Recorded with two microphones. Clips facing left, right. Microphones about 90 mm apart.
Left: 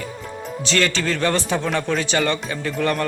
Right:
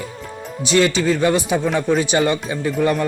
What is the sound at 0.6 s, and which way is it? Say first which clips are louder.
A man's voice: right 5 dB; 15° right (ahead or behind).